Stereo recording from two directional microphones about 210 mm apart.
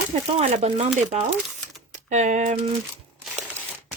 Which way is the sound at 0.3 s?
30° right (ahead or behind).